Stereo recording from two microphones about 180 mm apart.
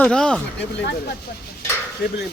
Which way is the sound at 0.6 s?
70° left (ahead or behind).